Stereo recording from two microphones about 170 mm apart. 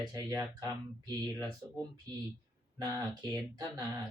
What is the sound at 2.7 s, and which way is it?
Speech, 25° right (ahead or behind).